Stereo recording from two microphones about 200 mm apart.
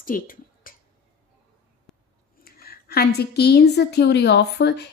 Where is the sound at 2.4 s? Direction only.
50° left (ahead or behind).